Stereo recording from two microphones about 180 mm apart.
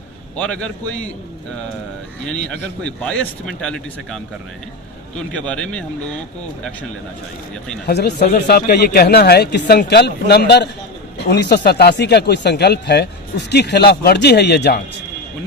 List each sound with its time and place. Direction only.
0.3 s a man's voice: 5° left (ahead or behind)
2.8 s speech: 5° left (ahead or behind)
5.3 s speech: 5° left (ahead or behind)
7.9 s speech: 65° left (ahead or behind)